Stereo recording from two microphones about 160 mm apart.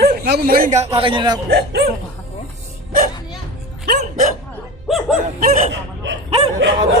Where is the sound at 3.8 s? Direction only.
55° right (ahead or behind).